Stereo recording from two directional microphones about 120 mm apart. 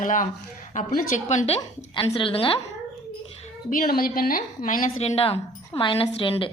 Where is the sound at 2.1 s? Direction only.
50° left (ahead or behind).